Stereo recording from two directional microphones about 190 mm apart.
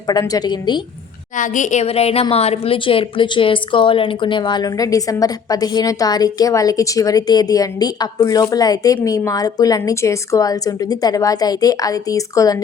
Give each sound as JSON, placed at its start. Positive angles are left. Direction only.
{"t": 0.1, "sound": "a woman's voice", "side_deg": 20}
{"t": 1.4, "sound": "a woman's voice", "side_deg": 40}